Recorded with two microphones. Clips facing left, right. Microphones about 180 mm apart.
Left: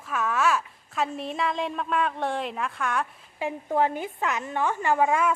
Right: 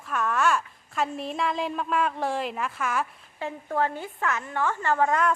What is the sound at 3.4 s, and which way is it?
A woman's voice, 15° left (ahead or behind).